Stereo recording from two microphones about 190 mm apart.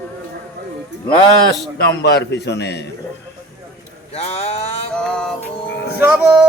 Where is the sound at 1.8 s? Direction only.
60° left (ahead or behind).